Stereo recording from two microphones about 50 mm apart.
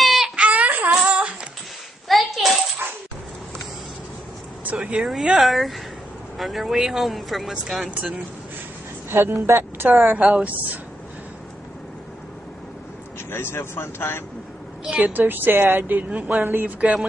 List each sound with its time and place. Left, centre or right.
0.0 s wail: centre
0.4 s wail: right
2.0 s a sound: centre
2.8 s dog: right
5.0 s speech: centre
7.8 s speech: centre
9.1 s speech: right
9.8 s a woman's voice: right
13.3 s speech: left
14.9 s a woman's voice: right
15.1 s a woman's voice: right